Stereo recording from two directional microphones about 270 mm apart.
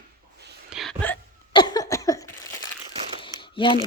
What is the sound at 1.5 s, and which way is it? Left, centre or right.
Cough, centre.